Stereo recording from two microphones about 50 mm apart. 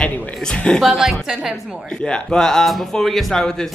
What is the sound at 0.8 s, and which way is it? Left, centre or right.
Speech, centre.